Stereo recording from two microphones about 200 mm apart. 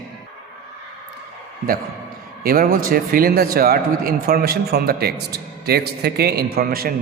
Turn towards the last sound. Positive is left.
turn(degrees=-45)  # may be behind; listen again after turning